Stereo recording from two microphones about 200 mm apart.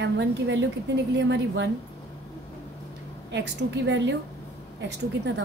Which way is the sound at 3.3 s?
60° right (ahead or behind).